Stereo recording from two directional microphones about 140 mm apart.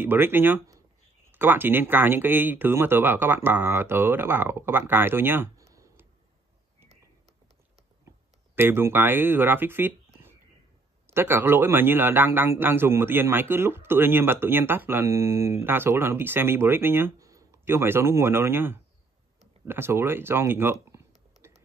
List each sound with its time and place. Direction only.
0.0 s speech: 15° right (ahead or behind)
8.5 s a man's voice: 15° right (ahead or behind)